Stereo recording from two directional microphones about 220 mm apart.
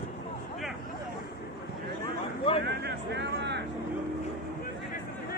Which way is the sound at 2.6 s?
50° right (ahead or behind).